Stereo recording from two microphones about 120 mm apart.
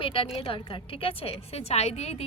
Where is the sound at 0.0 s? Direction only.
45° left (ahead or behind).